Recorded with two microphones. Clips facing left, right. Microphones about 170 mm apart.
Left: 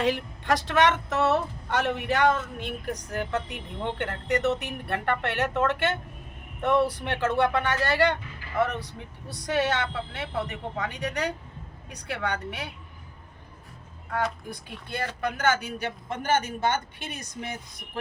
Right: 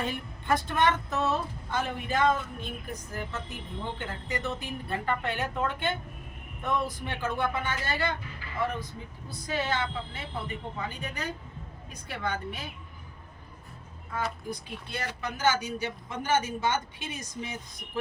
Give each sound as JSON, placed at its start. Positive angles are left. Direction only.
{"t": 0.0, "sound": "a woman's voice", "side_deg": 90}
{"t": 14.8, "sound": "speech", "side_deg": 55}